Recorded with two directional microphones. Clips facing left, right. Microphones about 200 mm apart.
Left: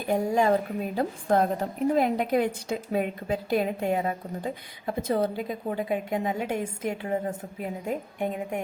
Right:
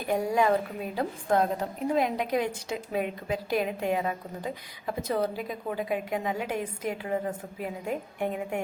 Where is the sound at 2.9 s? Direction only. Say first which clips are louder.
Left 2 dB; 35° left (ahead or behind).